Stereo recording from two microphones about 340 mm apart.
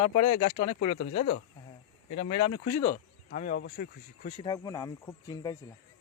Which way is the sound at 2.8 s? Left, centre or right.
Left.